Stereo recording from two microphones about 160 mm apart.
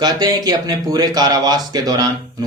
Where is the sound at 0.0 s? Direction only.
25° right (ahead or behind).